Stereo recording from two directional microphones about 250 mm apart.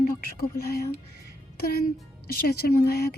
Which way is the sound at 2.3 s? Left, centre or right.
Left.